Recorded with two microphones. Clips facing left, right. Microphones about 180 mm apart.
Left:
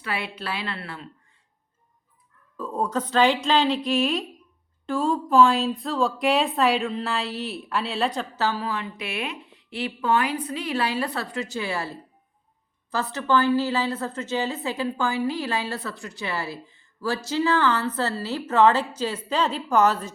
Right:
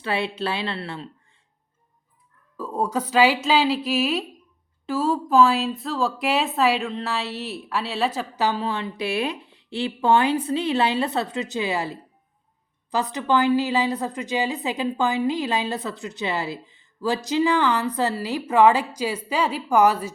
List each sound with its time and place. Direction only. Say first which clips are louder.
0.0 s a woman's voice: right 6 dB; 25° right (ahead or behind)
2.6 s a woman's voice: right 1 dB; 10° right (ahead or behind)
8.4 s a woman's voice: right 3 dB; 25° right (ahead or behind)